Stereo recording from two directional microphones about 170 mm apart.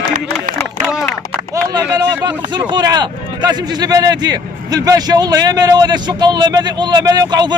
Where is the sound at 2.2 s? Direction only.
25° right (ahead or behind).